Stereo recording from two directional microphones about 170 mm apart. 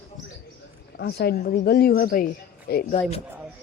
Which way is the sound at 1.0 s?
70° left (ahead or behind).